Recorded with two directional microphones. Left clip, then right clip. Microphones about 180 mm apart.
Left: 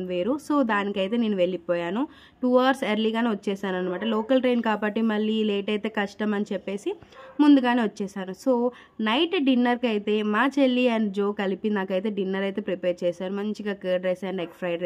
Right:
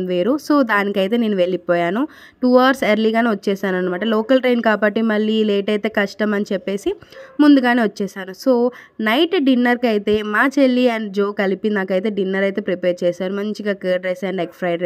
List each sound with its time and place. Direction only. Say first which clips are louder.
0.1 s speech: right 8 dB; 30° right (ahead or behind)